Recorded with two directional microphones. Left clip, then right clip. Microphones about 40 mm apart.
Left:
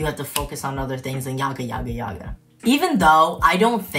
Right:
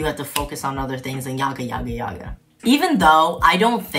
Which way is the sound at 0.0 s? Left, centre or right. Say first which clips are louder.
Right 2 dB; right.